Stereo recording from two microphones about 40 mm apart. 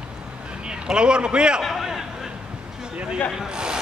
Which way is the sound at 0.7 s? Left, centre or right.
Right.